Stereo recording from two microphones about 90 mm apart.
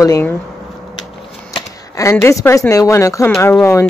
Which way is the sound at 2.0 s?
40° left (ahead or behind).